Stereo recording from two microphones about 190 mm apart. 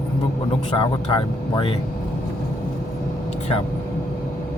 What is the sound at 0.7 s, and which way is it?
Speech, 25° left (ahead or behind).